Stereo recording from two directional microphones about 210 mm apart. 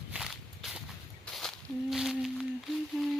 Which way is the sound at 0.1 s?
Centre (ahead or behind).